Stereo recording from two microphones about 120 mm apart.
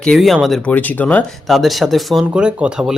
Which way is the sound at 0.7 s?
15° left (ahead or behind).